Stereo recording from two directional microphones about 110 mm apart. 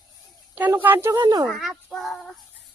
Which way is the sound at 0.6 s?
15° right (ahead or behind).